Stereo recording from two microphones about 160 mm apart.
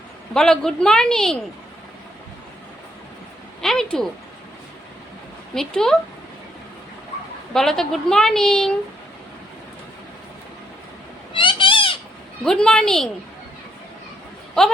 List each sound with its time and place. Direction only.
0.3 s a woman's voice: 5° left (ahead or behind)
3.6 s speech: 5° left (ahead or behind)
5.5 s a woman's voice: 5° left (ahead or behind)
7.5 s a woman's voice: centre (ahead or behind)
11.3 s bird: 30° left (ahead or behind)
12.5 s a woman's voice: 5° left (ahead or behind)